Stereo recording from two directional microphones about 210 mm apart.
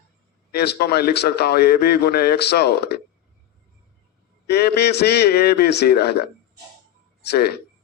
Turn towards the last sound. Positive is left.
turn(degrees=50)  # may be behind; listen again after turning